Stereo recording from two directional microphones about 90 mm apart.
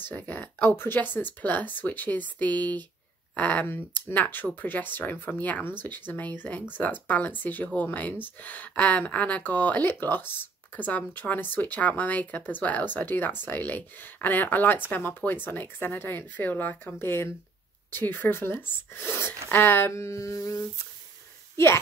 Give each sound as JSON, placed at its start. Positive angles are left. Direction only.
{"t": 0.0, "sound": "speech", "side_deg": 20}